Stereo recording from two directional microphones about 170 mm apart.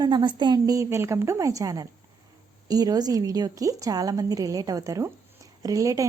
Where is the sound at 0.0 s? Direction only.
25° right (ahead or behind).